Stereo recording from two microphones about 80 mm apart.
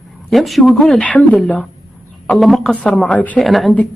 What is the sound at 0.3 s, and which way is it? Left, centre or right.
Speech, centre.